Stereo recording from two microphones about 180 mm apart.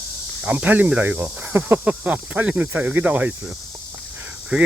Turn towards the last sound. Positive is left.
turn(degrees=-10)  # may be behind; listen again after turning